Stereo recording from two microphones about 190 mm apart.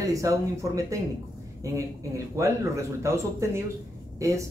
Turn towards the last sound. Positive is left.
turn(degrees=-15)  # may be behind; listen again after turning